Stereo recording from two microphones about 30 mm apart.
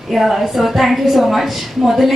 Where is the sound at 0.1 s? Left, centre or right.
Centre.